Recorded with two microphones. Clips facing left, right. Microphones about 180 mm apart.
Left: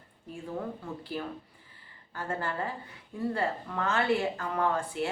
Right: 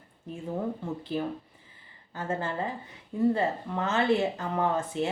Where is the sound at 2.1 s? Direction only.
20° right (ahead or behind).